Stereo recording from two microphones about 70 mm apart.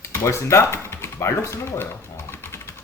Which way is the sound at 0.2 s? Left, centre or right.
Left.